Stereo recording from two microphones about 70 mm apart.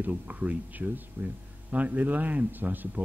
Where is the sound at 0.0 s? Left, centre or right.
Right.